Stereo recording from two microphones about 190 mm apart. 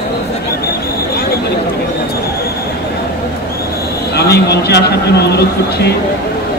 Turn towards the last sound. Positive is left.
turn(degrees=60)  # may be behind; listen again after turning